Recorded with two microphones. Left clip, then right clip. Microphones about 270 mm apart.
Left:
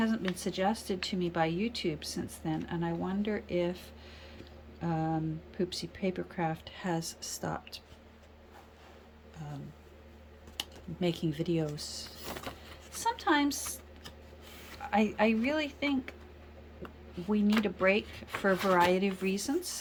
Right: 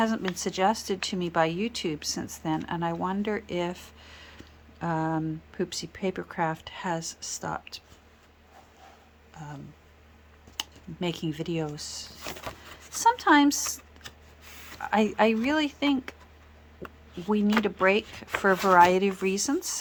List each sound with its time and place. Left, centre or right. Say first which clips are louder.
0.0 s speech: right 6 dB; centre
9.4 s speech: right 5 dB; centre
10.6 s speech: right 2 dB; centre
17.2 s speech: right 5 dB; right